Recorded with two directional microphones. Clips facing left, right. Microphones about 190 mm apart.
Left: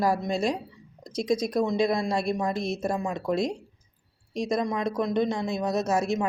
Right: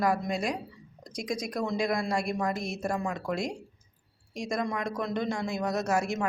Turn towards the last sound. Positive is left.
turn(degrees=20)  # may be behind; listen again after turning